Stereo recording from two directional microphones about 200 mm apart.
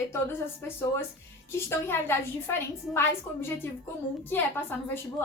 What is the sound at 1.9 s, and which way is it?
A woman's voice, 10° left (ahead or behind).